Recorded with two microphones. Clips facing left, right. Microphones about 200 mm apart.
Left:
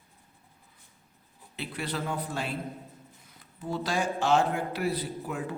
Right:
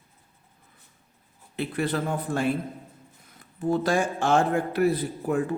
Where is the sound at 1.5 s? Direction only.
50° right (ahead or behind).